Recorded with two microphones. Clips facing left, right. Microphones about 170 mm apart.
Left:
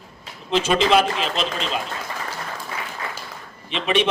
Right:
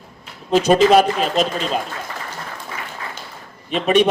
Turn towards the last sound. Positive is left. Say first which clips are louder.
# right 6 dB
turn(degrees=-40)  # may be behind; listen again after turning